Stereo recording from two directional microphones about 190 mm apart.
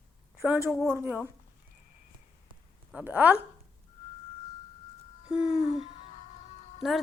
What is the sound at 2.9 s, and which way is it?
Speech, 10° right (ahead or behind).